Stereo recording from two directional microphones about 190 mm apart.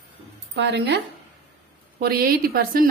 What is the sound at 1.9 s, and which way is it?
Speech, 50° right (ahead or behind).